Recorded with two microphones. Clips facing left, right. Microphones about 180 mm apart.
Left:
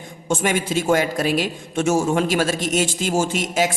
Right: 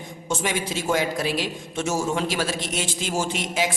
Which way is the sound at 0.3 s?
50° left (ahead or behind).